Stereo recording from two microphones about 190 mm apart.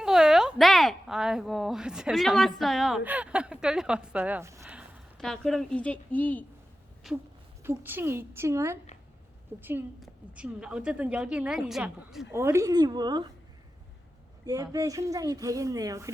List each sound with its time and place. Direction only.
0.0 s a woman's voice: 5° right (ahead or behind)
4.6 s a woman's voice: centre (ahead or behind)
7.6 s a woman's voice: 10° right (ahead or behind)
14.4 s speech: 20° right (ahead or behind)